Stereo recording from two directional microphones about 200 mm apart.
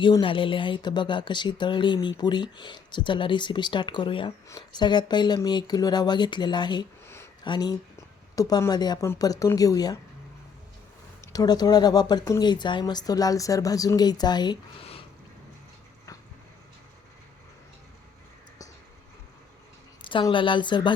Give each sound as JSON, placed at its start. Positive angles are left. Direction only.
{"t": 0.0, "sound": "speech", "side_deg": 25}
{"t": 11.3, "sound": "speech", "side_deg": 20}
{"t": 20.1, "sound": "speech", "side_deg": 25}